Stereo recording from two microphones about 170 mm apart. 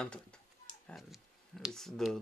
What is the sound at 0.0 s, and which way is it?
Speech, 5° left (ahead or behind).